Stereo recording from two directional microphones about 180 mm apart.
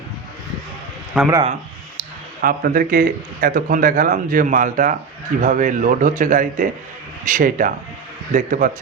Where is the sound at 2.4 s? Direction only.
50° right (ahead or behind).